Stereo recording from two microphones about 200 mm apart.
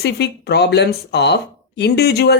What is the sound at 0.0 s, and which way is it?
Speech, 55° left (ahead or behind).